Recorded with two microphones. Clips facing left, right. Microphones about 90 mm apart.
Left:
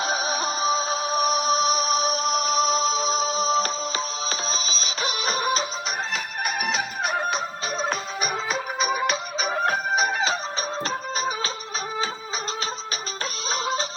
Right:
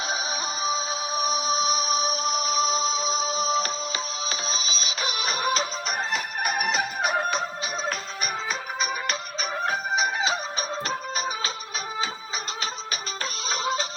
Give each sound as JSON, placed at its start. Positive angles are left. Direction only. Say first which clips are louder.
{"t": 0.0, "sound": "music", "louder": "left 4 dB", "side_deg": 45}
{"t": 6.1, "sound": "music", "louder": "right 1 dB", "side_deg": -5}
{"t": 8.8, "sound": "music", "louder": "left 6 dB", "side_deg": 10}
{"t": 10.0, "sound": "music", "louder": "left 2 dB", "side_deg": 40}
{"t": 13.5, "sound": "music", "louder": "left 1 dB", "side_deg": 30}